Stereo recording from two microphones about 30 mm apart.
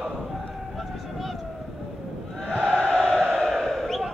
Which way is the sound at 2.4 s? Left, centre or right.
Left.